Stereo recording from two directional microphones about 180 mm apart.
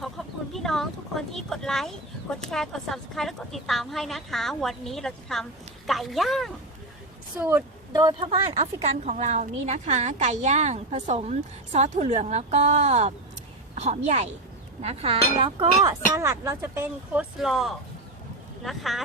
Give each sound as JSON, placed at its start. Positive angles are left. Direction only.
{"t": 0.5, "sound": "a woman's voice", "side_deg": 0}
{"t": 7.3, "sound": "a woman's voice", "side_deg": -10}
{"t": 8.5, "sound": "a woman's voice", "side_deg": -40}
{"t": 16.1, "sound": "a woman's voice", "side_deg": -15}